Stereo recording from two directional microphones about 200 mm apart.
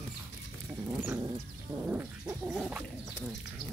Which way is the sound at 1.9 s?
10° right (ahead or behind).